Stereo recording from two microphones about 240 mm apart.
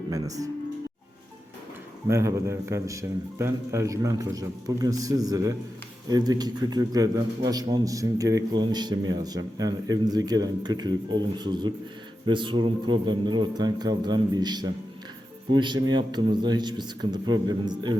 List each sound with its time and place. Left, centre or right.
0.1 s a man's voice: centre
2.0 s a man's voice: centre